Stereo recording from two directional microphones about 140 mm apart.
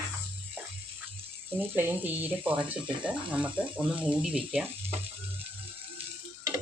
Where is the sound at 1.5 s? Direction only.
15° right (ahead or behind).